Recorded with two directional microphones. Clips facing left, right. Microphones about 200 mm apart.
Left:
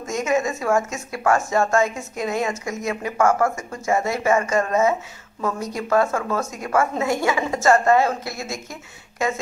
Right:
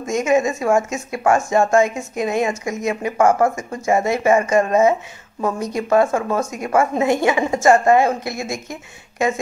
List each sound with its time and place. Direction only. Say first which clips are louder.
0.0 s a woman's voice: right 5 dB; 15° right (ahead or behind)